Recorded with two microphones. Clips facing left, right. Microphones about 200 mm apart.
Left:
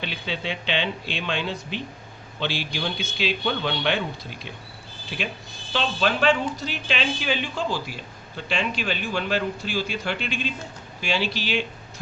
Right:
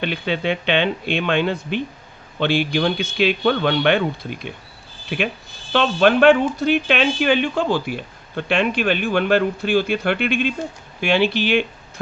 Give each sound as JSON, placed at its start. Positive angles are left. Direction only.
{"t": 0.0, "sound": "speech", "side_deg": -60}